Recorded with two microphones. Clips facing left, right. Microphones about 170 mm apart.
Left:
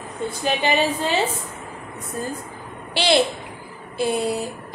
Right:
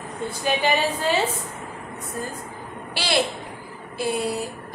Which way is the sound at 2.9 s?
20° left (ahead or behind).